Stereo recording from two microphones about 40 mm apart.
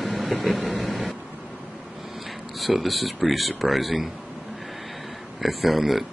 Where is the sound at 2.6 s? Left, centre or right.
Centre.